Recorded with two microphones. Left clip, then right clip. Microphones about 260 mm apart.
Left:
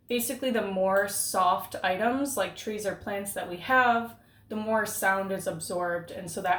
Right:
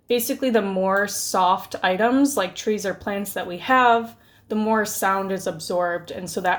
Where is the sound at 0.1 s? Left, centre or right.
Right.